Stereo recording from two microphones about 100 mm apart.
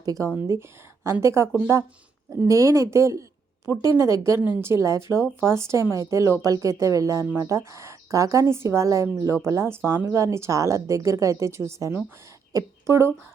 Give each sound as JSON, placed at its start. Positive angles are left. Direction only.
{"t": 0.0, "sound": "a woman's voice", "side_deg": -35}